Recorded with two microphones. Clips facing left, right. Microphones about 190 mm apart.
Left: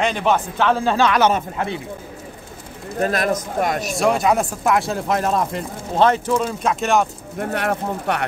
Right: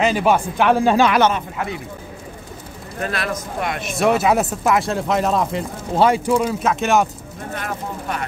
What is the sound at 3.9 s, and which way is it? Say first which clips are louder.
Speech: right 3 dB; centre (ahead or behind).